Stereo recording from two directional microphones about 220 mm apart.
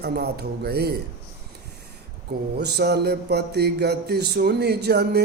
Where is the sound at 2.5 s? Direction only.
50° right (ahead or behind).